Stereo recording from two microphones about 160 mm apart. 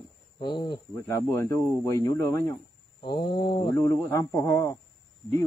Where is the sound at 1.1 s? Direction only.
15° left (ahead or behind).